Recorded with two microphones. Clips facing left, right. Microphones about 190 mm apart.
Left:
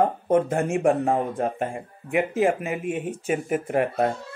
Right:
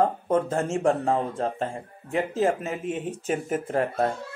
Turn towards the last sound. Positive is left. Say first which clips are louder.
# left 2 dB
turn(degrees=15)  # may be behind; listen again after turning